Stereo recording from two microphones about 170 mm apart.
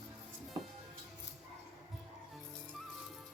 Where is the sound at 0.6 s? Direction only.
20° right (ahead or behind).